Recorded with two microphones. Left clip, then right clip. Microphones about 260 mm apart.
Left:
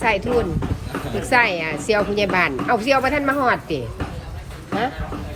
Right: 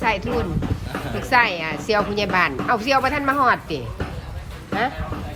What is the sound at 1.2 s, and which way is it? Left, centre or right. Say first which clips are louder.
A woman's voice: left 1 dB; centre.